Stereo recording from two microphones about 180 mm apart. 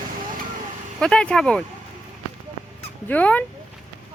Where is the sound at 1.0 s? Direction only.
5° left (ahead or behind).